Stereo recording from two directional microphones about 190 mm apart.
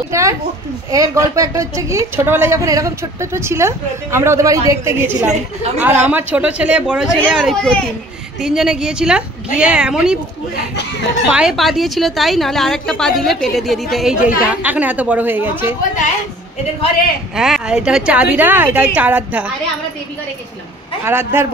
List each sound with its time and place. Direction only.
0.1 s a woman's voice: 15° right (ahead or behind)
11.2 s a woman's voice: 5° right (ahead or behind)
17.4 s a woman's voice: 5° right (ahead or behind)
21.0 s a woman's voice: 10° right (ahead or behind)